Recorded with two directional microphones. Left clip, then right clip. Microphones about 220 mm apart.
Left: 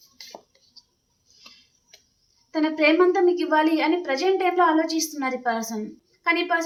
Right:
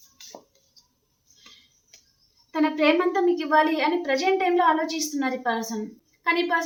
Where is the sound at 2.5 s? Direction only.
15° left (ahead or behind).